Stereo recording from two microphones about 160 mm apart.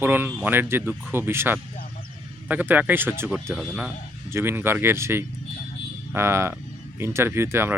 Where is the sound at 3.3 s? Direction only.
Centre (ahead or behind).